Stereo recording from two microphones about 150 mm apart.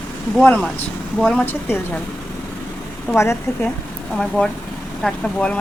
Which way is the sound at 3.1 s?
15° left (ahead or behind).